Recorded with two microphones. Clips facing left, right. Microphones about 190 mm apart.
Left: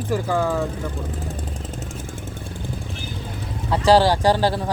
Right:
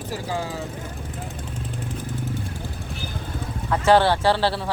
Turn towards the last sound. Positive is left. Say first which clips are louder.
# left 2 dB
turn(degrees=15)  # may be behind; listen again after turning